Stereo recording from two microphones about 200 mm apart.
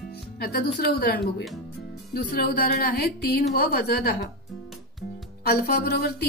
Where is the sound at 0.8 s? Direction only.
50° left (ahead or behind).